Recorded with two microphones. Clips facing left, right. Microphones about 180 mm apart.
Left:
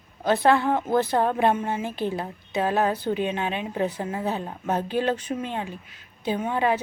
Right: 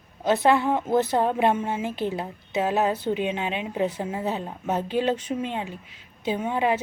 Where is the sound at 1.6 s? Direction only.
10° right (ahead or behind).